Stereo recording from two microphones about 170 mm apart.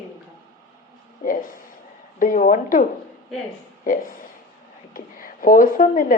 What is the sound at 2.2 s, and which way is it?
A woman's voice, 55° left (ahead or behind).